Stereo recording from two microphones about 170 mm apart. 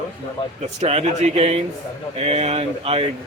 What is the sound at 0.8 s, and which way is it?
Speech, 35° right (ahead or behind).